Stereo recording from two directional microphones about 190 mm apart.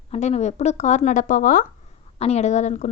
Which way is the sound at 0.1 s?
35° left (ahead or behind).